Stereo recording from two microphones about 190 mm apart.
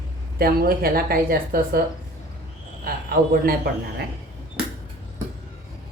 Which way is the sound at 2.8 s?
50° right (ahead or behind).